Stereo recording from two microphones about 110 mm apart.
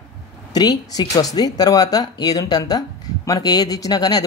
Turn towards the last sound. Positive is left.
turn(degrees=35)  # may be behind; listen again after turning